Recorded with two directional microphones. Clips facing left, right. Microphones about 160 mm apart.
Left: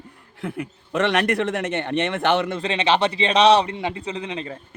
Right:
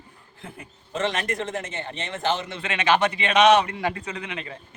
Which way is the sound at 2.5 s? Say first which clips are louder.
Left 2 dB; 30° left (ahead or behind).